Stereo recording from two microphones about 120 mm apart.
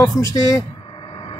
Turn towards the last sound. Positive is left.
turn(degrees=30)  # may be behind; listen again after turning